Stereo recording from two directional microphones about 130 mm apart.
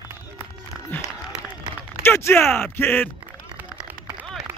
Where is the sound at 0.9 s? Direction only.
15° left (ahead or behind).